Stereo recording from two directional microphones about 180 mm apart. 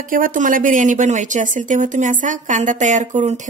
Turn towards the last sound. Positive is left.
turn(degrees=-40)  # may be behind; listen again after turning